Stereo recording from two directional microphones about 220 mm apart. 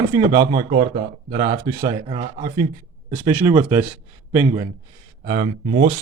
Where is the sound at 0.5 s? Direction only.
25° right (ahead or behind).